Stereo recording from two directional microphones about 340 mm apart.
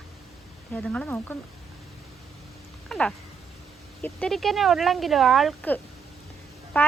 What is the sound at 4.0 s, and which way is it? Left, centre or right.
A woman's voice, centre.